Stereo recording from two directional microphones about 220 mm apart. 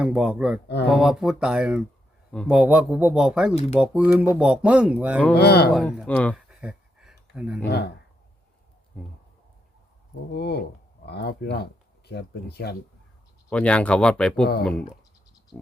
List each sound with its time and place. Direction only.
0.0 s speech: 5° right (ahead or behind)
3.5 s speech: 30° left (ahead or behind)
3.8 s speech: 5° right (ahead or behind)
5.3 s speech: 45° left (ahead or behind)
5.7 s speech: centre (ahead or behind)
6.3 s a sound: 5° right (ahead or behind)
7.7 s speech: 50° left (ahead or behind)
10.3 s speech: 50° left (ahead or behind)
13.5 s speech: 5° left (ahead or behind)